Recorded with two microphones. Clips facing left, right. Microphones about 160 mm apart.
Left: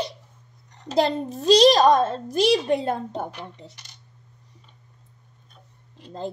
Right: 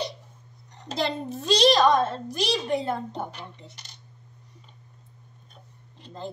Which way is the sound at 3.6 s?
35° left (ahead or behind).